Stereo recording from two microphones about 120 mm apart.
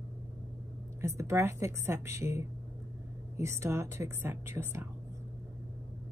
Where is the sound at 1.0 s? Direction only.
25° right (ahead or behind).